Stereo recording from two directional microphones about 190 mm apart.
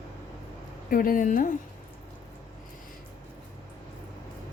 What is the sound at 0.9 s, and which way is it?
Speech, 50° left (ahead or behind).